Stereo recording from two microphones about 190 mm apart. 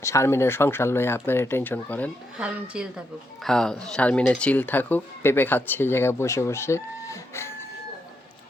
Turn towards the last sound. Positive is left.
turn(degrees=15)  # may be behind; listen again after turning